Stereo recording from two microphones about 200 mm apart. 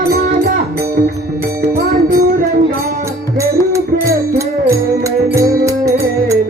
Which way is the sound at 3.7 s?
15° right (ahead or behind).